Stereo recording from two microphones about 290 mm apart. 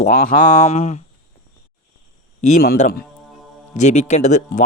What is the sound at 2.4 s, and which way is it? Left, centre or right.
A man's voice, left.